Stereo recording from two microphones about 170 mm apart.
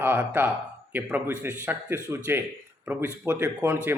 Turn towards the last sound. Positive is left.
turn(degrees=-15)  # may be behind; listen again after turning